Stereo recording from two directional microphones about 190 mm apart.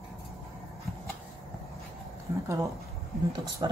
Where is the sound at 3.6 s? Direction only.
25° right (ahead or behind).